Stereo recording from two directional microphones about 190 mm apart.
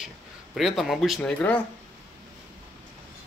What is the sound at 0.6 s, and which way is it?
Speech, centre (ahead or behind).